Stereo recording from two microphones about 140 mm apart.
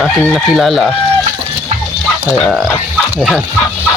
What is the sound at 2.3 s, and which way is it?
Speech, 5° right (ahead or behind).